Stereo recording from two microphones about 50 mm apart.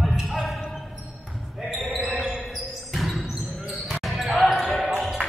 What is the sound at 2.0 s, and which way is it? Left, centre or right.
Music, centre.